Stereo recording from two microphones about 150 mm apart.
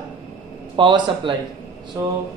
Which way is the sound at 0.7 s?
35° right (ahead or behind).